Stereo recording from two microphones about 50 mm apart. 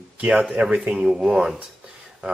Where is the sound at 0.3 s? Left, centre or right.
Centre.